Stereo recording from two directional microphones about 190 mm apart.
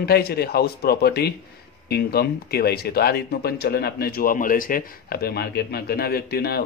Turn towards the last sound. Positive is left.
turn(degrees=55)  # may be behind; listen again after turning